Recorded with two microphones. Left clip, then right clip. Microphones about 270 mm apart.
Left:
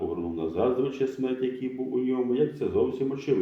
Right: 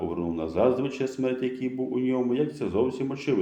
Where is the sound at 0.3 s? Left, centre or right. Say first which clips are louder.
Right 2 dB; right.